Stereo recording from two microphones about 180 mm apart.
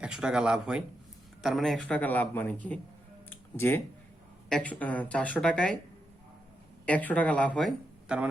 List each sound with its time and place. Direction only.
0.0 s speech: 5° right (ahead or behind)
3.2 s a sound: 10° left (ahead or behind)
4.4 s speech: 5° left (ahead or behind)
6.8 s speech: 10° left (ahead or behind)
8.0 s speech: 5° right (ahead or behind)